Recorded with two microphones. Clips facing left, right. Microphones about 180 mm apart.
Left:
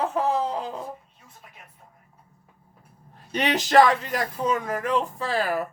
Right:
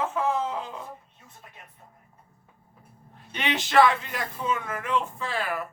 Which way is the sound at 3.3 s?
40° left (ahead or behind).